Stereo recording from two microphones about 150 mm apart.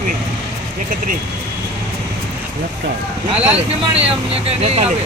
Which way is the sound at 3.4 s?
40° right (ahead or behind).